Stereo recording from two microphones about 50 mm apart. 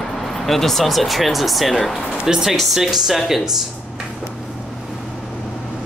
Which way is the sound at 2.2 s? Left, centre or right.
Centre.